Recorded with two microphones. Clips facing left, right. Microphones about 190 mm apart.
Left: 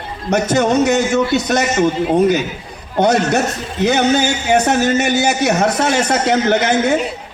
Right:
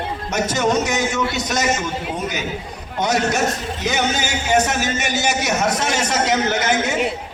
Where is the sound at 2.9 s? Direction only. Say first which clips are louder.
Left 5 dB; 60° left (ahead or behind).